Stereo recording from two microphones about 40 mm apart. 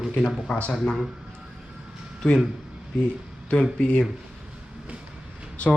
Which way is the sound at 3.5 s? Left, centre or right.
Left.